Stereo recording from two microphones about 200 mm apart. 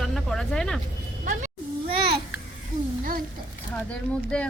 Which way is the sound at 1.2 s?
35° right (ahead or behind).